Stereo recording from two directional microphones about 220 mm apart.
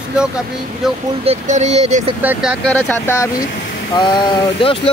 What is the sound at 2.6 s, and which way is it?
Speech, 10° left (ahead or behind).